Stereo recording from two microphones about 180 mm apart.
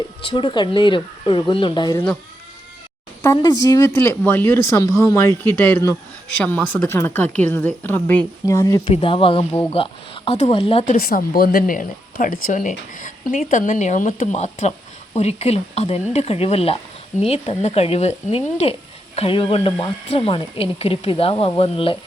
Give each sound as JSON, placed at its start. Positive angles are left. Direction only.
{"t": 0.3, "sound": "speech", "side_deg": 25}
{"t": 3.2, "sound": "speech", "side_deg": 20}
{"t": 8.9, "sound": "speech", "side_deg": 35}
{"t": 10.8, "sound": "a woman's voice", "side_deg": 55}